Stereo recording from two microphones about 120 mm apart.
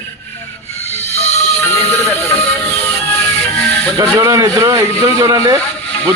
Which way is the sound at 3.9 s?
25° right (ahead or behind).